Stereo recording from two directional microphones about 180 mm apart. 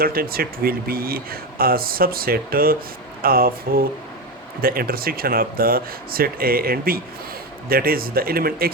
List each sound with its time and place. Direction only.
0.0 s speech: 55° right (ahead or behind)